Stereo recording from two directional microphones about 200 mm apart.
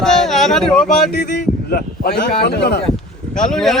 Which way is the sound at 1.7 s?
50° left (ahead or behind).